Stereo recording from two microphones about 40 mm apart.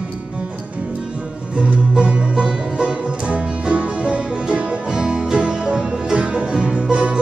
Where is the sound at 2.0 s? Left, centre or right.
Right.